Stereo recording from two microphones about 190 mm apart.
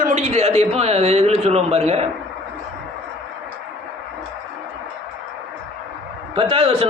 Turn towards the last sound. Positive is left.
turn(degrees=-30)  # may be behind; listen again after turning